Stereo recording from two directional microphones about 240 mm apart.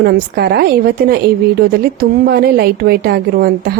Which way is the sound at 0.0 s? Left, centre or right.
Right.